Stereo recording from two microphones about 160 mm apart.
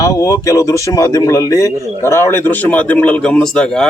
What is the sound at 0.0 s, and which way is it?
A man's voice, 20° left (ahead or behind).